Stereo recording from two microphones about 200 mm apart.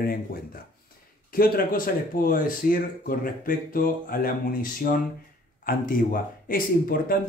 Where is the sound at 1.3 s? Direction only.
45° left (ahead or behind).